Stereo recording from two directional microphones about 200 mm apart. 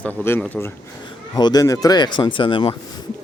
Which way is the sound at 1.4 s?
20° left (ahead or behind).